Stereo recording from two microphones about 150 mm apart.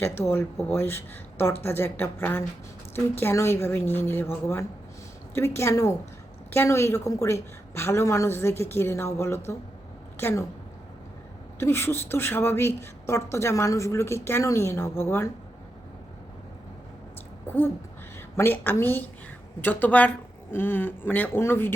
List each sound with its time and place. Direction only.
0.0 s a woman's voice: 15° left (ahead or behind)
5.3 s a woman's voice: 15° left (ahead or behind)
11.6 s a woman's voice: 15° left (ahead or behind)
17.4 s a sound: 15° left (ahead or behind)
18.3 s a woman's voice: 15° left (ahead or behind)